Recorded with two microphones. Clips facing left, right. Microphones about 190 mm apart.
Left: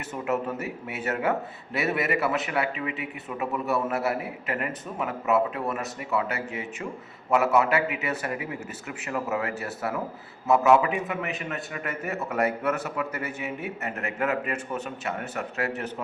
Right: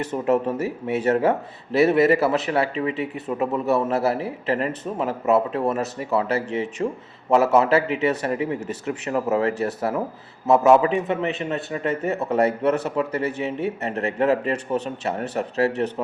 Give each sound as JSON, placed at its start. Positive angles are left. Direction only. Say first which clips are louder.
{"t": 0.0, "sound": "a man's voice", "louder": "right 7 dB", "side_deg": -30}